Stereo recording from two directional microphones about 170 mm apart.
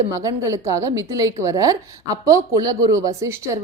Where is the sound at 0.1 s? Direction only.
20° right (ahead or behind).